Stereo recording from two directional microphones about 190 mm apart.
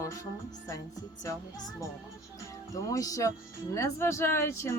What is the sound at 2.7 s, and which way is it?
Speech, 15° left (ahead or behind).